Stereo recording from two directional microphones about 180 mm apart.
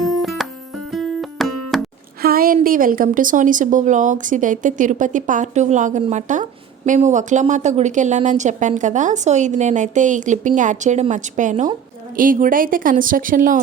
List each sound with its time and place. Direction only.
0.2 s music: centre (ahead or behind)
2.2 s a sound: 55° right (ahead or behind)
2.6 s a woman's voice: 50° right (ahead or behind)